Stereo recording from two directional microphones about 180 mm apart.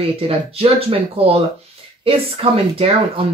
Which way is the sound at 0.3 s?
30° right (ahead or behind).